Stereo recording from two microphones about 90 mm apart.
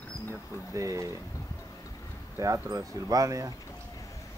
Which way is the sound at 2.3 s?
35° right (ahead or behind).